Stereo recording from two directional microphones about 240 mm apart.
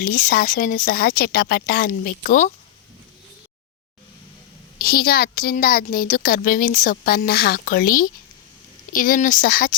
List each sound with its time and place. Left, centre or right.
0.0 s a woman's voice: left
4.8 s a woman's voice: left